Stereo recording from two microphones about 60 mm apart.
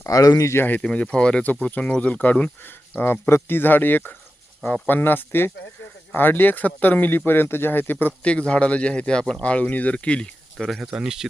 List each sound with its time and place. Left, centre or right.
0.1 s speech: left
0.8 s speech: centre
3.0 s speech: left
8.2 s speech: centre
10.9 s speech: centre